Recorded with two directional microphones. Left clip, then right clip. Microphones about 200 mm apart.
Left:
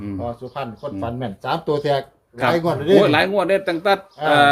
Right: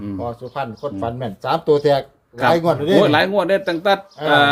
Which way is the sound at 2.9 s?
10° right (ahead or behind).